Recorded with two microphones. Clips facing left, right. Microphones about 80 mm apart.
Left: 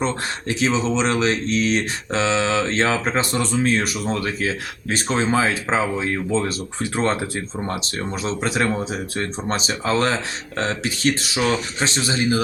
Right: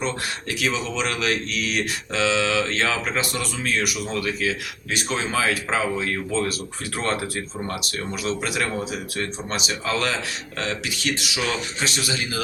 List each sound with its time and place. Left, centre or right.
0.0 s speech: left